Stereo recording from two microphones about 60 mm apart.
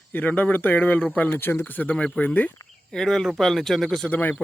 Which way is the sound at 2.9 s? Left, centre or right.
Centre.